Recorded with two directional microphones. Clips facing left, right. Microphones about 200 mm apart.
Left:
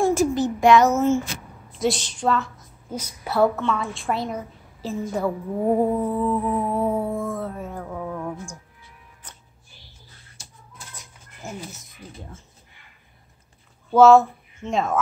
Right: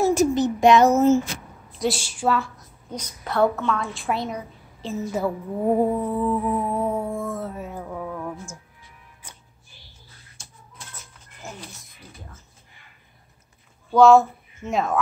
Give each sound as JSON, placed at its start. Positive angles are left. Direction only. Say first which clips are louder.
{"t": 0.1, "sound": "speech", "louder": "right 1 dB", "side_deg": -20}
{"t": 0.8, "sound": "speech", "louder": "right 3 dB", "side_deg": -35}
{"t": 1.7, "sound": "a woman's voice", "louder": "left 2 dB", "side_deg": 0}
{"t": 2.5, "sound": "a woman's voice", "louder": "left 2 dB", "side_deg": 5}
{"t": 5.8, "sound": "music", "louder": "even", "side_deg": 0}
{"t": 6.2, "sound": "a woman's voice", "louder": "even", "side_deg": -5}
{"t": 6.5, "sound": "music", "louder": "left 1 dB", "side_deg": 5}
{"t": 13.9, "sound": "music", "louder": "left 1 dB", "side_deg": 5}